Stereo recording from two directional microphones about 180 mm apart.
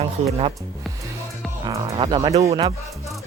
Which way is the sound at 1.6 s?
20° right (ahead or behind).